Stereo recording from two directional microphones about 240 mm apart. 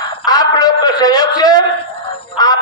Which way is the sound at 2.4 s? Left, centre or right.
Centre.